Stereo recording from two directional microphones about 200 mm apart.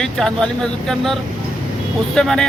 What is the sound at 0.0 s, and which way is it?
Speech, 5° left (ahead or behind).